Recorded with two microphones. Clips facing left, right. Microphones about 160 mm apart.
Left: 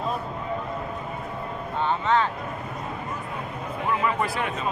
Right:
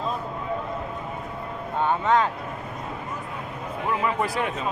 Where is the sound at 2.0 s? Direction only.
40° right (ahead or behind).